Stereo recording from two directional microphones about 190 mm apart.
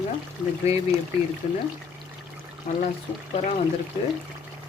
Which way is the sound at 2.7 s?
40° left (ahead or behind).